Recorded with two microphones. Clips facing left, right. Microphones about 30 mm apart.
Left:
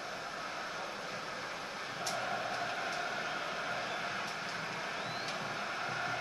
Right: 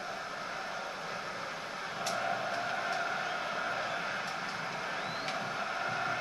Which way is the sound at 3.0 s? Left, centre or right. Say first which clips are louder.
Right 3 dB; centre.